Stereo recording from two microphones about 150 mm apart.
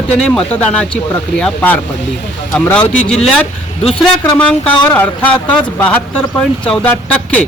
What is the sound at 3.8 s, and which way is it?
Speech, 40° left (ahead or behind).